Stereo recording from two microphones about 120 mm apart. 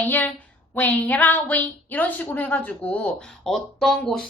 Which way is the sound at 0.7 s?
15° left (ahead or behind).